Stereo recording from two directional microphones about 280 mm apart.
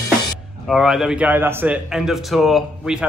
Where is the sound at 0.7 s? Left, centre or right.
Centre.